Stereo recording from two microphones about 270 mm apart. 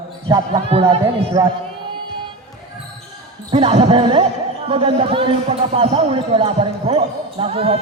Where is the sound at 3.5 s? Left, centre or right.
Centre.